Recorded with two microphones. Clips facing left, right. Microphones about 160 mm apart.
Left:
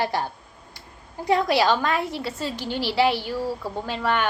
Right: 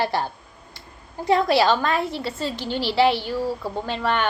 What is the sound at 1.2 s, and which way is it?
A woman's voice, 15° left (ahead or behind).